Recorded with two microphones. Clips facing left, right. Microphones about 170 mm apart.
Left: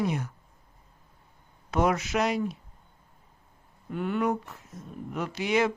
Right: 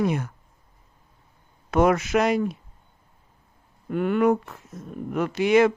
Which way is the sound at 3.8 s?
65° right (ahead or behind).